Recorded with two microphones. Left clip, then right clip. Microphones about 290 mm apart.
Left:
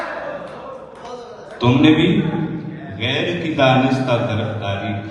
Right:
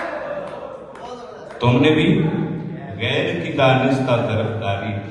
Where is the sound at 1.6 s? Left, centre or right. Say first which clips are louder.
Left 2 dB; right.